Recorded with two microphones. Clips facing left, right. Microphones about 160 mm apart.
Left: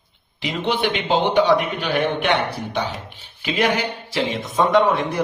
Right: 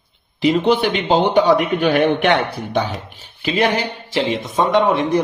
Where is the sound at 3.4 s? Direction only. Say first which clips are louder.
Right 3 dB; 35° right (ahead or behind).